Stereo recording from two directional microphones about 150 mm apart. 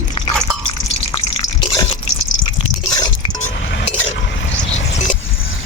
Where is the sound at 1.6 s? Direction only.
35° left (ahead or behind).